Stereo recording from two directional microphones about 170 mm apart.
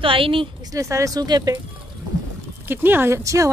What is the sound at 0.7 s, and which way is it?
Speech, 20° right (ahead or behind).